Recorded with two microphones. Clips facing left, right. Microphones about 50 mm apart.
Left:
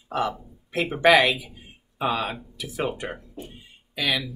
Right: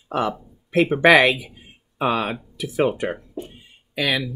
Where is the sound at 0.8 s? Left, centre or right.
Right.